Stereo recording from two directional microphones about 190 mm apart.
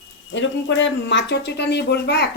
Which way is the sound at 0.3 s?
75° left (ahead or behind).